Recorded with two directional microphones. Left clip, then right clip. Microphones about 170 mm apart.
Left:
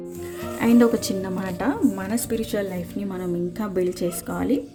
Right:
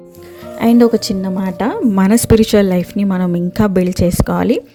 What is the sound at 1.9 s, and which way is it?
A woman's voice, 55° right (ahead or behind).